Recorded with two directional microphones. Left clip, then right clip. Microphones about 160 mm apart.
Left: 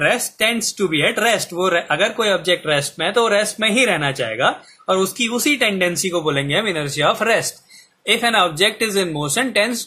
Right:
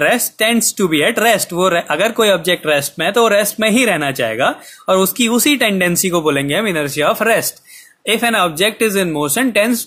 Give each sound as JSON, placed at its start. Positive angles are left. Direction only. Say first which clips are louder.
{"t": 0.0, "sound": "speech", "louder": "right 3 dB", "side_deg": -60}